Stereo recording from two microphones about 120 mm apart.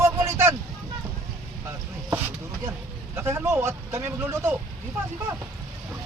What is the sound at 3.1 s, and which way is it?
Speech, 20° right (ahead or behind).